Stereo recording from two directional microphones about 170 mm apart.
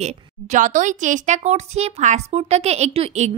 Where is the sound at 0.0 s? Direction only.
45° right (ahead or behind).